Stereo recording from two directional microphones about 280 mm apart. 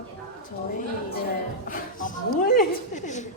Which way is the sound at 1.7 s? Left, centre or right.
Left.